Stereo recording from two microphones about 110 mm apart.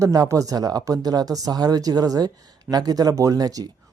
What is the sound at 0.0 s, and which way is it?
Speech, 30° right (ahead or behind).